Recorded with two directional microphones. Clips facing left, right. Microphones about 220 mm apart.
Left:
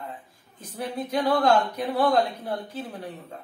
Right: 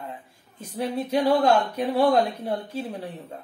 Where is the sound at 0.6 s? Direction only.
25° right (ahead or behind).